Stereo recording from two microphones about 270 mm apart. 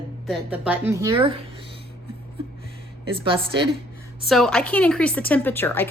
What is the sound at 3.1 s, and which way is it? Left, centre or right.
Speech, centre.